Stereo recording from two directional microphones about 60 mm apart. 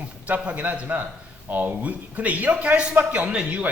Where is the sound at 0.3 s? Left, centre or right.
Right.